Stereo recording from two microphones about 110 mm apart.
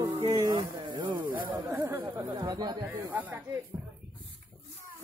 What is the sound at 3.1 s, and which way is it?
Speech, 15° right (ahead or behind).